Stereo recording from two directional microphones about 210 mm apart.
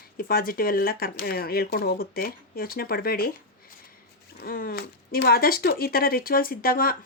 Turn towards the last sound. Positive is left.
turn(degrees=45)  # may be behind; listen again after turning